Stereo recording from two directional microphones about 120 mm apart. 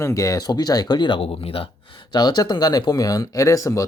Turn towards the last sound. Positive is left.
turn(degrees=25)  # may be behind; listen again after turning